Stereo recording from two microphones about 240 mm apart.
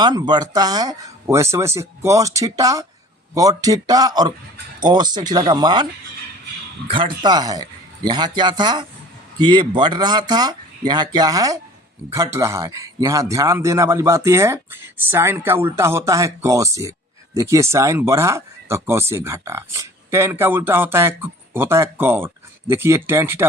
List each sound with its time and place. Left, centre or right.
0.0 s speech: centre